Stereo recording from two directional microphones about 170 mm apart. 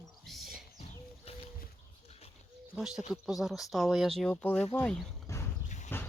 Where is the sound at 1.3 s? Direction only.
35° left (ahead or behind).